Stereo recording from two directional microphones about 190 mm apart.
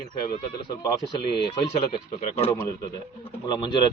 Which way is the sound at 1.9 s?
30° left (ahead or behind).